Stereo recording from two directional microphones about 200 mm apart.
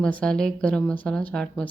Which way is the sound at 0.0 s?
5° left (ahead or behind).